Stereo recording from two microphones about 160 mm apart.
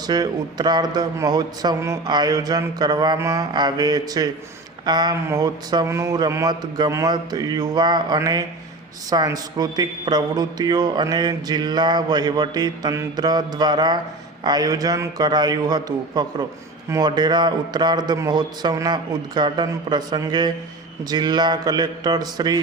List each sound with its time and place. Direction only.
0.1 s a man's voice: 25° right (ahead or behind)